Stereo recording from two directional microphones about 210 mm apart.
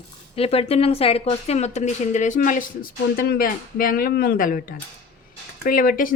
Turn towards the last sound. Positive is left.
turn(degrees=40)  # may be behind; listen again after turning